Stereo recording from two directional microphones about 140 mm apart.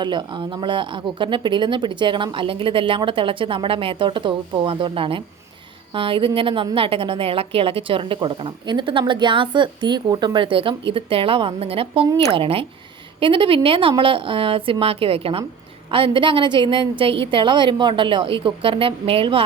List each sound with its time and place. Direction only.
0.0 s a woman's voice: 35° right (ahead or behind)